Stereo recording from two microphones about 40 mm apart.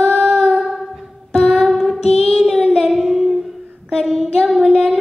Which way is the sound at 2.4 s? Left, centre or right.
Centre.